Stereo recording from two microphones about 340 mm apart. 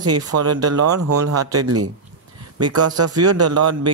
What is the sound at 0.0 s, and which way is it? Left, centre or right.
Speech, right.